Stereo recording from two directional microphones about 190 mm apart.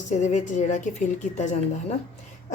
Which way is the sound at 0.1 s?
40° left (ahead or behind).